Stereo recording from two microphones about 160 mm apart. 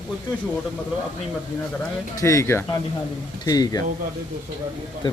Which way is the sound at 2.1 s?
20° left (ahead or behind).